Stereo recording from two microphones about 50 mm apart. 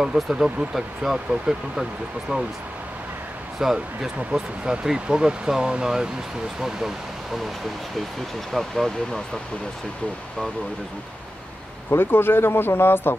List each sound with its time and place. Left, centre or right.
0.0 s speech: centre
3.5 s speech: centre
8.5 s speech: centre
11.9 s speech: left